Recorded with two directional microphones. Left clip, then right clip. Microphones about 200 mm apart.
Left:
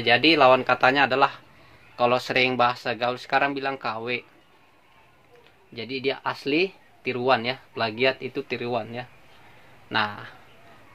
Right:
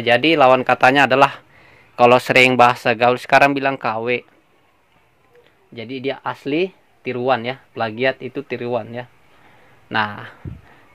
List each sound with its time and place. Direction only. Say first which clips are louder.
0.0 s speech: right 4 dB; 40° right (ahead or behind)
5.8 s speech: right 2 dB; 30° right (ahead or behind)
9.8 s speech: right 5 dB; 45° right (ahead or behind)